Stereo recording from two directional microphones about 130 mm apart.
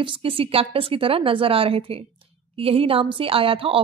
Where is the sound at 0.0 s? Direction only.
40° right (ahead or behind).